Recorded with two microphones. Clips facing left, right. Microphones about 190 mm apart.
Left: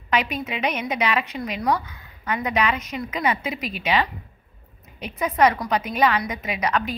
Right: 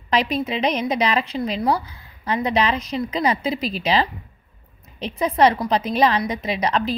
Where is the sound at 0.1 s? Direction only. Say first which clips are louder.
Right 3 dB; 35° right (ahead or behind).